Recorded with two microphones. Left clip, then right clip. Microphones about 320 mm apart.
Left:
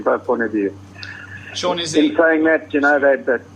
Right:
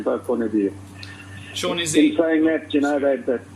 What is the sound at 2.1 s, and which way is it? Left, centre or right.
Speech, left.